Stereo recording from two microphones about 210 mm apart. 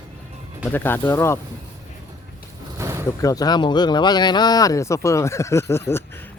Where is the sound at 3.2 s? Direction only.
15° left (ahead or behind).